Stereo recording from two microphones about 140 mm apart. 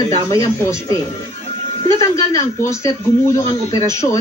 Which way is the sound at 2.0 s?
20° left (ahead or behind).